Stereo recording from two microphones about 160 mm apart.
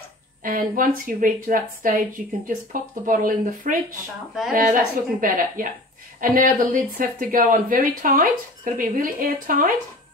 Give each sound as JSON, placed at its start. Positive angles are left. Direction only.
{"t": 0.4, "sound": "speech", "side_deg": -60}